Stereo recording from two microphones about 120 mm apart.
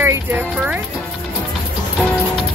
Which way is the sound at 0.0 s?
15° right (ahead or behind).